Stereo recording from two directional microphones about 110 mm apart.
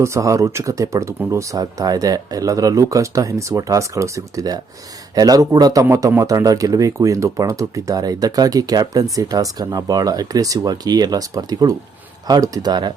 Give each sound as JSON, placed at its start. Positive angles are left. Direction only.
{"t": 0.0, "sound": "speech", "side_deg": -25}